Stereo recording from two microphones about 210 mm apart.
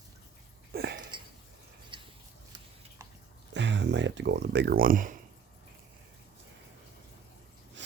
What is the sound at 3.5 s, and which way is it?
Speech, 55° right (ahead or behind).